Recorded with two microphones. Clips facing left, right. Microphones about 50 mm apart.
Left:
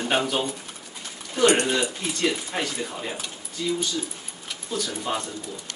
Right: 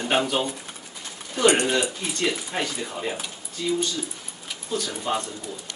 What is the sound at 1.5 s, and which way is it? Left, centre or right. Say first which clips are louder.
Speech: right 1 dB; centre.